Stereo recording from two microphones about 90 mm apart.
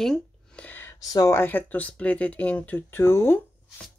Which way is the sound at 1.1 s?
45° left (ahead or behind).